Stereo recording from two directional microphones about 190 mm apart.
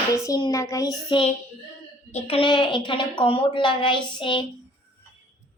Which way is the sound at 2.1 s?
30° left (ahead or behind).